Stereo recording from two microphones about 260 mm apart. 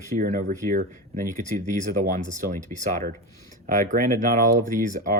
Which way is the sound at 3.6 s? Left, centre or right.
Right.